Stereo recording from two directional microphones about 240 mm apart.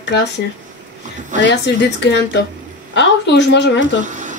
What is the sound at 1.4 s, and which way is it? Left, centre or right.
Speech, left.